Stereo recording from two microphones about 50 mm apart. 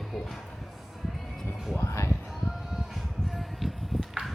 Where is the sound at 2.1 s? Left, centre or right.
Centre.